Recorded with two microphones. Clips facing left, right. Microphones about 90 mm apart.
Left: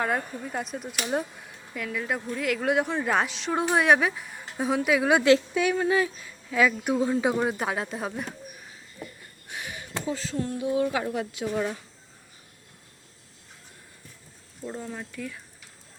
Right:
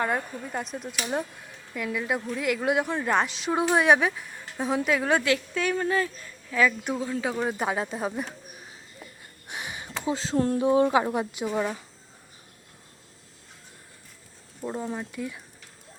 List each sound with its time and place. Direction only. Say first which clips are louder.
0.0 s a woman's voice: even; centre (ahead or behind)
7.0 s speech: left 5 dB; 20° left (ahead or behind)
7.4 s a woman's voice: even; centre (ahead or behind)
9.5 s a sound: even; 20° right (ahead or behind)
10.3 s speech: right 9 dB; 50° right (ahead or behind)
10.6 s speech: right 4 dB; 35° right (ahead or behind)
14.9 s speech: right 3 dB; 15° right (ahead or behind)